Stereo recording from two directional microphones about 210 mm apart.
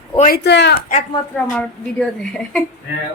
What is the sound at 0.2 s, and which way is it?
Speech, 45° left (ahead or behind).